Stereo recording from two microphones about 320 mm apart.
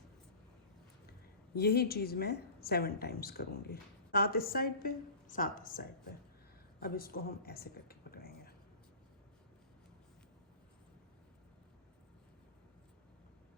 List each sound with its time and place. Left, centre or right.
1.5 s a woman's voice: left